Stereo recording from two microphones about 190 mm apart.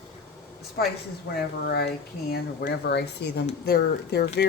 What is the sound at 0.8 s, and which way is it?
Speech, 55° left (ahead or behind).